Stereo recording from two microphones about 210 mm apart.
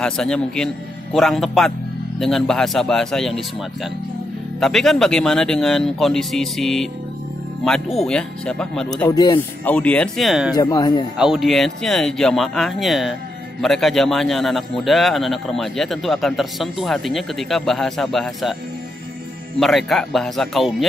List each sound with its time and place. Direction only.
0.0 s a man's voice: 5° left (ahead or behind)
4.6 s a man's voice: centre (ahead or behind)
8.0 s a man's voice: 5° left (ahead or behind)
9.1 s speech: 20° left (ahead or behind)
9.7 s a man's voice: 5° left (ahead or behind)
10.5 s speech: 20° left (ahead or behind)
11.1 s a man's voice: centre (ahead or behind)
19.6 s a man's voice: centre (ahead or behind)